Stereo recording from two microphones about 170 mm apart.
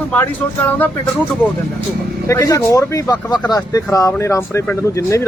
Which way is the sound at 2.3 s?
20° left (ahead or behind).